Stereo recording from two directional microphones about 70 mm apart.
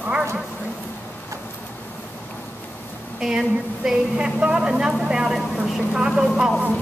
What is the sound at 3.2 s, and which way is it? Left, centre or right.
A woman's voice, centre.